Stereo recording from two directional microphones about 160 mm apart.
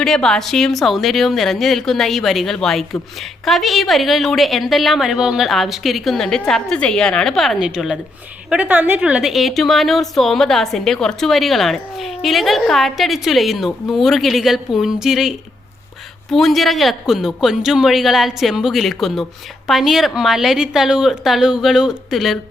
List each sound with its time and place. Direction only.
0.0 s a woman's voice: 5° left (ahead or behind)